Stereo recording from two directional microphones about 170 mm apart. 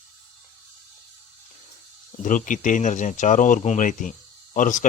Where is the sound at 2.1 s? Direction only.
50° left (ahead or behind).